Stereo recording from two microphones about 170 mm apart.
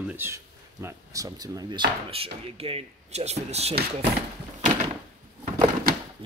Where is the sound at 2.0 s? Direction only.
35° right (ahead or behind).